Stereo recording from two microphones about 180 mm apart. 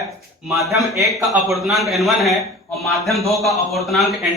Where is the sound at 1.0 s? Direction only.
15° right (ahead or behind).